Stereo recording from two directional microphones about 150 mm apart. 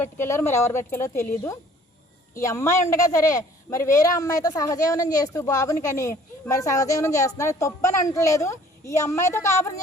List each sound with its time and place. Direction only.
0.0 s speech: 15° left (ahead or behind)